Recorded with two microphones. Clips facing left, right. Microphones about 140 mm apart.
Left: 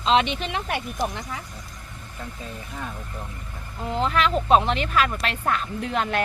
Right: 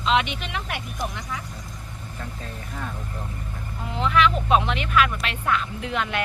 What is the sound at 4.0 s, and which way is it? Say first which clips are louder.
Speech: right 2 dB; 40° left (ahead or behind).